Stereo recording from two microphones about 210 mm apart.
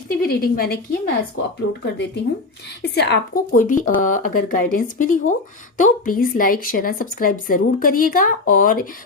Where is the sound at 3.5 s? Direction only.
35° left (ahead or behind).